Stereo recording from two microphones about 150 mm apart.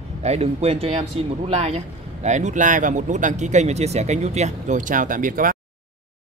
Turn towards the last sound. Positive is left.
turn(degrees=-65)  # may be behind; listen again after turning